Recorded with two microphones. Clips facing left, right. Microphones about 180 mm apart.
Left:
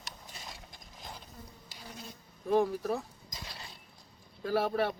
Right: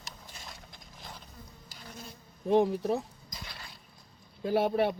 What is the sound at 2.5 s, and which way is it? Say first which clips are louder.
Speech: right 3 dB; 25° right (ahead or behind).